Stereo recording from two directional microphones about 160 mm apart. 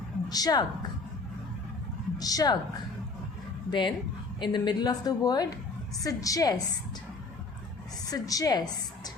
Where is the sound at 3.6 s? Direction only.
30° left (ahead or behind).